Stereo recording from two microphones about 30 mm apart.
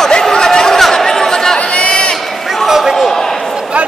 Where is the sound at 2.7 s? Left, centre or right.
Centre.